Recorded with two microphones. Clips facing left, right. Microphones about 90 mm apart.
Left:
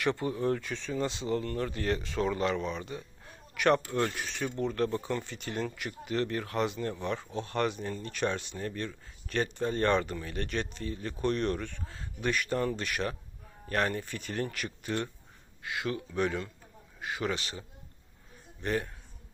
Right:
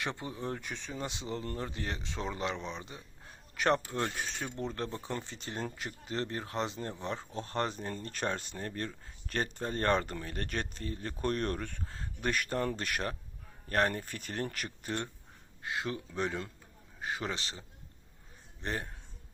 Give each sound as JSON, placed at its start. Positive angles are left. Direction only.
{"t": 0.0, "sound": "speech", "side_deg": -15}
{"t": 18.6, "sound": "speech", "side_deg": -30}